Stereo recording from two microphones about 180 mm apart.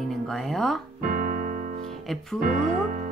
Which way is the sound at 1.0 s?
50° right (ahead or behind).